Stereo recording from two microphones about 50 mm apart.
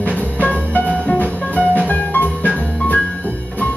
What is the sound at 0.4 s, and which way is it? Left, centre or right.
Music, left.